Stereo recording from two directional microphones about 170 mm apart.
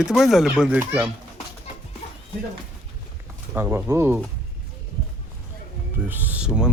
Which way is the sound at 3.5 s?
15° right (ahead or behind).